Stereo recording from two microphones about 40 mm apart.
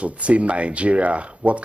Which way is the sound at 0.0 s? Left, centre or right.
Right.